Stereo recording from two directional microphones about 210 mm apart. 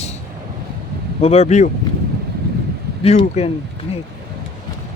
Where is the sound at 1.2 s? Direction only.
30° left (ahead or behind).